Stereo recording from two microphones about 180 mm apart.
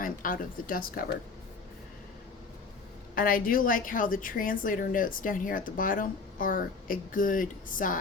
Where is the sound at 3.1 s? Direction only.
50° left (ahead or behind).